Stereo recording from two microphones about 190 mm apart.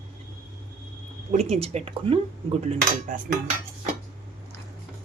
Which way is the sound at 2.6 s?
45° right (ahead or behind).